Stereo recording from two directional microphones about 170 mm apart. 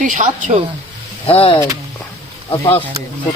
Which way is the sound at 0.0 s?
50° right (ahead or behind).